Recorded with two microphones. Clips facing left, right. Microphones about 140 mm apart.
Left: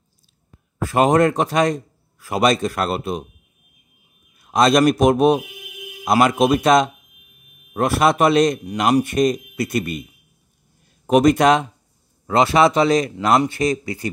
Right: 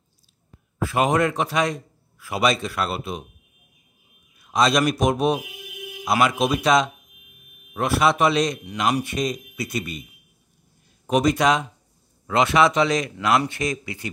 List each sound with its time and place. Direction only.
0.7 s a man's voice: 45° left (ahead or behind)
4.5 s speech: 50° left (ahead or behind)
11.1 s speech: 55° left (ahead or behind)
12.3 s speech: 35° left (ahead or behind)